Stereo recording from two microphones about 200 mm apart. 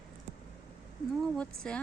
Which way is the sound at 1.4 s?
5° left (ahead or behind).